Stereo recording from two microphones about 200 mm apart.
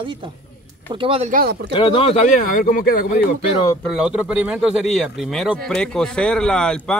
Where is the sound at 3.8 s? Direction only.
Centre (ahead or behind).